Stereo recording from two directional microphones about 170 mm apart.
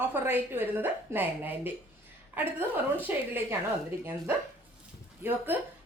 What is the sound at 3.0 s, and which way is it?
Speech, 10° right (ahead or behind).